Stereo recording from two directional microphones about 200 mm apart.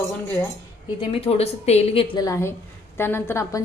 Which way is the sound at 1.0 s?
30° left (ahead or behind).